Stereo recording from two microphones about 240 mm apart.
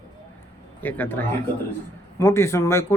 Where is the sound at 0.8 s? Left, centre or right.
Centre.